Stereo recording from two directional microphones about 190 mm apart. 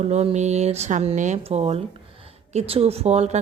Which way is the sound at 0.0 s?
35° right (ahead or behind).